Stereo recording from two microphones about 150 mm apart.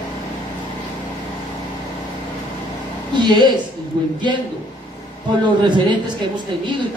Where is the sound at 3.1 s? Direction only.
30° right (ahead or behind).